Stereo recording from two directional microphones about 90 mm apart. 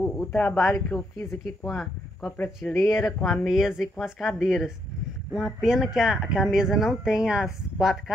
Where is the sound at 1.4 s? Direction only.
5° left (ahead or behind).